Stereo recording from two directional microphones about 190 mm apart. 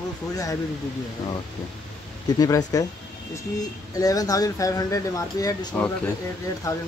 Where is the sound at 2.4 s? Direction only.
20° left (ahead or behind).